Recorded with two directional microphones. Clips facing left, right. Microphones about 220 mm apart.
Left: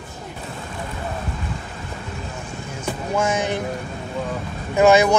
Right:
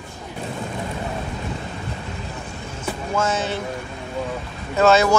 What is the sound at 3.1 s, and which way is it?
Speech, 15° left (ahead or behind).